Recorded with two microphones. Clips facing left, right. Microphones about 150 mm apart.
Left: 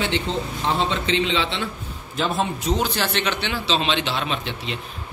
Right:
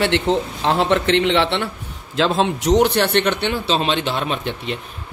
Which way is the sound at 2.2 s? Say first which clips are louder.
Right 6 dB; 90° right.